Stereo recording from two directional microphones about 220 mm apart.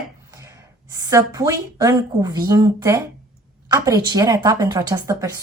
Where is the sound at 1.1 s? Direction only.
15° right (ahead or behind).